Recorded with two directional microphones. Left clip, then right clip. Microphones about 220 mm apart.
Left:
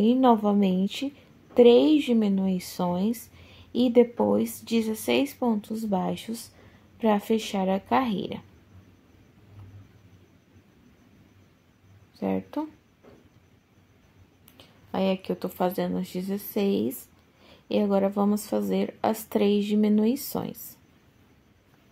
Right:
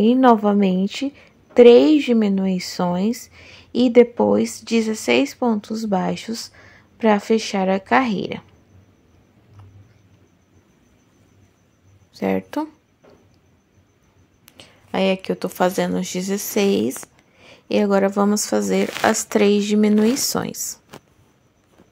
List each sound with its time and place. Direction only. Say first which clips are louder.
0.0 s a woman's voice: right 7 dB; 20° right (ahead or behind)
12.1 s speech: right 8 dB; 20° right (ahead or behind)
14.4 s speech: right 8 dB; 25° right (ahead or behind)